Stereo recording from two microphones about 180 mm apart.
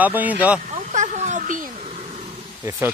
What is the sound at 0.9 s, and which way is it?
Speech, 40° right (ahead or behind).